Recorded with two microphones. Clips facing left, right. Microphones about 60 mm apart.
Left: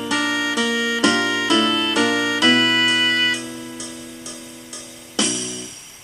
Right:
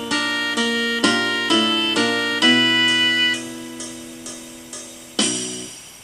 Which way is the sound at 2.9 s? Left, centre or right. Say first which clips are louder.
Even; centre.